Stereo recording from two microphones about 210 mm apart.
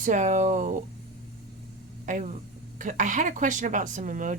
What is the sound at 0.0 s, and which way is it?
Speech, 35° right (ahead or behind).